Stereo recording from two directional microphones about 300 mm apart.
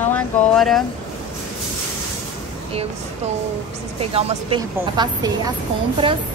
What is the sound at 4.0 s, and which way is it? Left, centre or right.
A woman's voice, centre.